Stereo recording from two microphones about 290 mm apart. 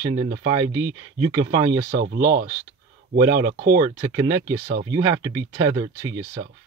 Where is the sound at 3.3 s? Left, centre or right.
Right.